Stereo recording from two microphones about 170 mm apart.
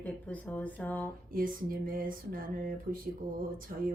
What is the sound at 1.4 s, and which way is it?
Speech, 55° right (ahead or behind).